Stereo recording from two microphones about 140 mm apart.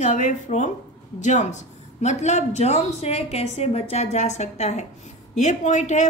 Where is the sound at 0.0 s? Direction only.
60° left (ahead or behind).